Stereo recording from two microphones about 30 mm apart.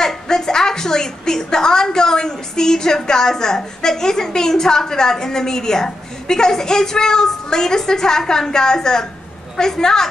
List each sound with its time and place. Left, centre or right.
0.0 s a woman's voice: left